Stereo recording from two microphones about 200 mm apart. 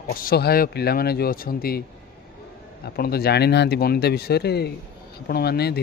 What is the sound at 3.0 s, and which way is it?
Speech, 50° left (ahead or behind).